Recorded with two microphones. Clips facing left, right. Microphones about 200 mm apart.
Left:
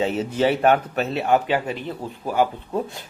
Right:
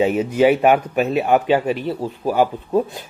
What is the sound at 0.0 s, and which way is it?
A man's voice, 10° right (ahead or behind).